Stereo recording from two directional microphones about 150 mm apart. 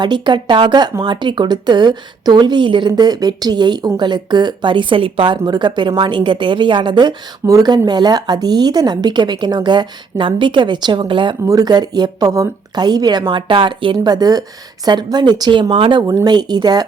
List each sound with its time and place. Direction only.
0.0 s speech: 30° right (ahead or behind)